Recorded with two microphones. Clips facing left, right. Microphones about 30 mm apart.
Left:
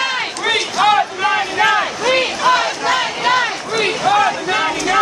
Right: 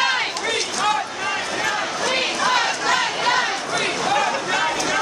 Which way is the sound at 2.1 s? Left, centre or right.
Centre.